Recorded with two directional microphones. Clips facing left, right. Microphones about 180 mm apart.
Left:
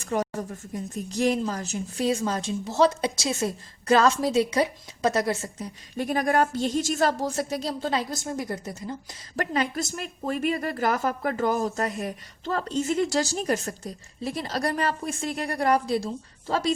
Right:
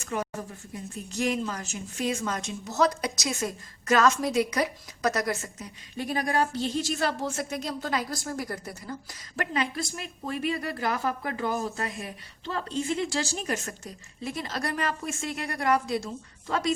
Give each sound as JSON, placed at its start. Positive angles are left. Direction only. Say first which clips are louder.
{"t": 0.0, "sound": "a sound", "louder": "left 5 dB", "side_deg": 35}
{"t": 1.1, "sound": "speech", "louder": "left 4 dB", "side_deg": 35}
{"t": 6.0, "sound": "speech", "louder": "left 4 dB", "side_deg": 45}
{"t": 9.3, "sound": "speech", "louder": "left 3 dB", "side_deg": 35}